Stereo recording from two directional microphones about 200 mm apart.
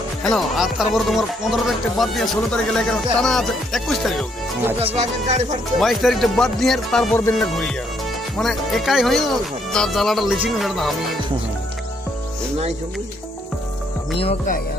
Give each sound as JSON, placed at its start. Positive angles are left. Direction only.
{"t": 0.2, "sound": "speech", "side_deg": 0}
{"t": 5.8, "sound": "speech", "side_deg": 0}
{"t": 14.2, "sound": "speech", "side_deg": 30}